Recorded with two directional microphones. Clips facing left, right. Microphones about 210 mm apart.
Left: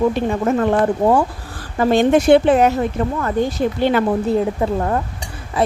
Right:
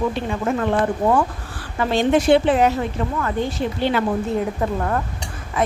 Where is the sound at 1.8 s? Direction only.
50° left (ahead or behind).